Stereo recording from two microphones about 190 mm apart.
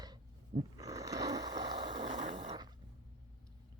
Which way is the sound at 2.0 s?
40° right (ahead or behind).